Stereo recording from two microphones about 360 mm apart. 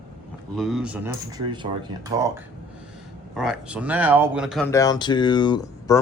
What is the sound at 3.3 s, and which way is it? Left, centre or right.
Speech, centre.